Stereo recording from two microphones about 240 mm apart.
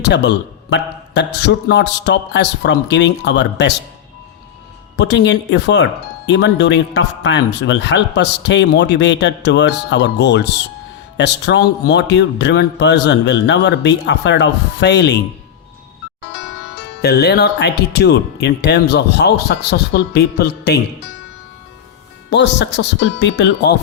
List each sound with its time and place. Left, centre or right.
0.0 s speech: left
4.9 s speech: left
17.0 s speech: left
22.3 s speech: left